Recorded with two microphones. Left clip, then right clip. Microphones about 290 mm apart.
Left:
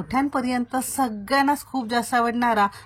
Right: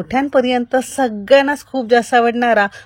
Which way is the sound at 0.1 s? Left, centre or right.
Centre.